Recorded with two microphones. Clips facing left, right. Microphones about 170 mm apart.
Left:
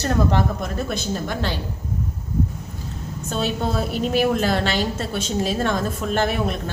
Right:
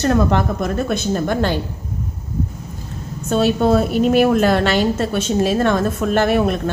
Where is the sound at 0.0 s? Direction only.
65° right (ahead or behind).